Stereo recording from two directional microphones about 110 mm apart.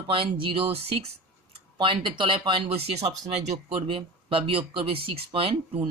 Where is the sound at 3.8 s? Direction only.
50° right (ahead or behind).